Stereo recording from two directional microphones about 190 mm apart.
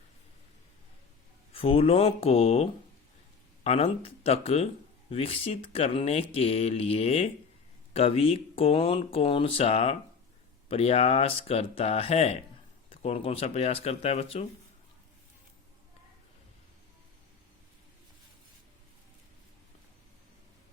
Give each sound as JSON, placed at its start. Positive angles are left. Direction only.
{"t": 1.5, "sound": "speech", "side_deg": 30}